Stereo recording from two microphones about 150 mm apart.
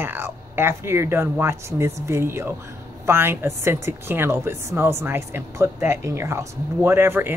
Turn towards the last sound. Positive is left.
turn(degrees=-15)  # may be behind; listen again after turning